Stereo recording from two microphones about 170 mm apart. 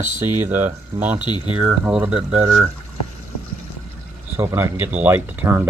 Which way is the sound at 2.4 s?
25° right (ahead or behind).